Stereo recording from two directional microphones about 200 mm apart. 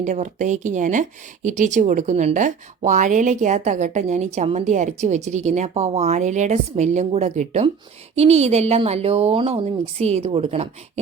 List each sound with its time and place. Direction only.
0.0 s speech: 35° right (ahead or behind)